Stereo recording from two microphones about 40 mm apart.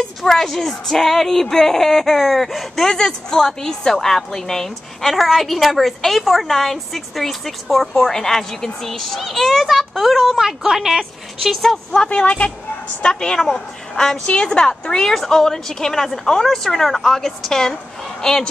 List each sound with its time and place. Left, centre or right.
0.2 s a woman's voice: centre
5.1 s a woman's voice: centre
10.3 s a woman's voice: centre
11.9 s speech: left
13.1 s a woman's voice: centre